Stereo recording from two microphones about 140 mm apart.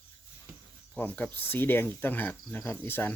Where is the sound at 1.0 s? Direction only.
10° left (ahead or behind).